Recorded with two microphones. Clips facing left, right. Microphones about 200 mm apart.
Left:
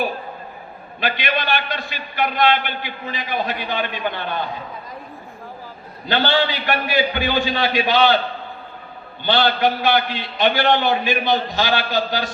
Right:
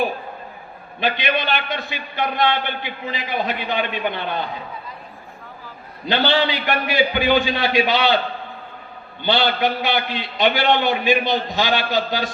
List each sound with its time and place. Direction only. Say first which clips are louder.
0.9 s a man's voice: right 2 dB; 20° right (ahead or behind)
6.1 s a man's voice: even; 20° right (ahead or behind)
9.2 s a man's voice: left 1 dB; 20° right (ahead or behind)